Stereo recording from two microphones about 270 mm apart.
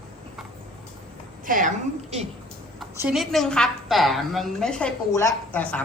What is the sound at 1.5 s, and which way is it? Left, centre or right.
Speech, right.